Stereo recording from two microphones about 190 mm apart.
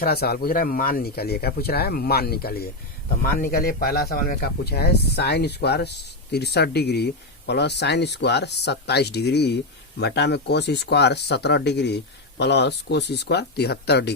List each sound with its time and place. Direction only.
0.0 s speech: 55° left (ahead or behind)